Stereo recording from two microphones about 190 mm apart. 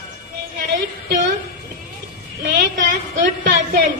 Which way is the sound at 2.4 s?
75° right (ahead or behind).